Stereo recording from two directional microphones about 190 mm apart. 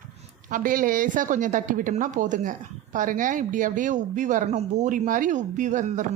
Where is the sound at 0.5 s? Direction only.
45° right (ahead or behind).